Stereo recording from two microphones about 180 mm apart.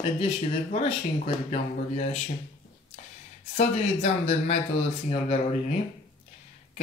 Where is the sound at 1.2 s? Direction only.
35° left (ahead or behind).